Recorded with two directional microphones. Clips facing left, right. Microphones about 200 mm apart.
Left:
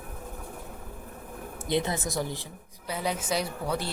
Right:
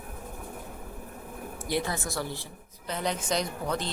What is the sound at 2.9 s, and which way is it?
A woman's voice, 5° left (ahead or behind).